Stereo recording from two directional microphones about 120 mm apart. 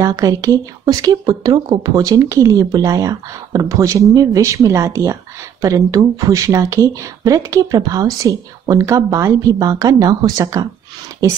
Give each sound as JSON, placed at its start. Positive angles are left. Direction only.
{"t": 0.0, "sound": "speech", "side_deg": -30}